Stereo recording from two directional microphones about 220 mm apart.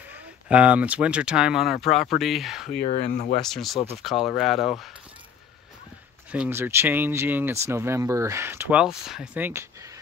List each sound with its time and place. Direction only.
0.1 s speech: 5° right (ahead or behind)
2.8 s speech: 45° left (ahead or behind)
3.4 s speech: centre (ahead or behind)
6.3 s speech: 5° right (ahead or behind)